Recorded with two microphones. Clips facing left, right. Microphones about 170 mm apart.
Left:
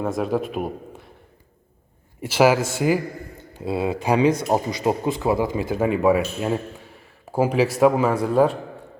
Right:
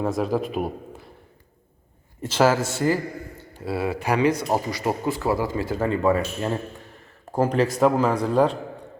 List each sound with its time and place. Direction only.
0.0 s speech: centre (ahead or behind)
2.2 s speech: 10° left (ahead or behind)